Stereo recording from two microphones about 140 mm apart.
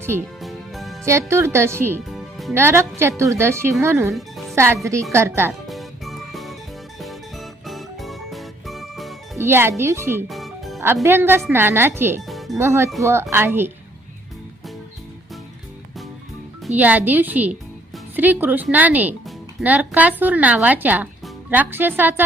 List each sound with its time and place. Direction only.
0.4 s music: centre (ahead or behind)
1.3 s speech: 20° right (ahead or behind)
2.0 s music: centre (ahead or behind)
2.5 s speech: 15° right (ahead or behind)
4.1 s music: centre (ahead or behind)
4.5 s a woman's voice: 20° right (ahead or behind)
5.6 s music: centre (ahead or behind)
9.4 s speech: 15° right (ahead or behind)
10.2 s music: centre (ahead or behind)
11.0 s a woman's voice: 15° right (ahead or behind)
12.3 s music: centre (ahead or behind)
12.5 s a woman's voice: 20° right (ahead or behind)
16.7 s a woman's voice: 10° right (ahead or behind)